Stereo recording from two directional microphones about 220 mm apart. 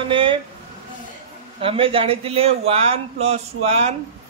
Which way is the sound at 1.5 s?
25° right (ahead or behind).